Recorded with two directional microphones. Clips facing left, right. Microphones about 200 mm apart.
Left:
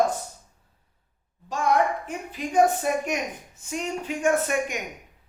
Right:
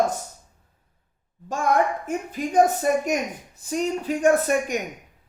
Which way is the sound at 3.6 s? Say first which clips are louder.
Right 5 dB; 35° right (ahead or behind).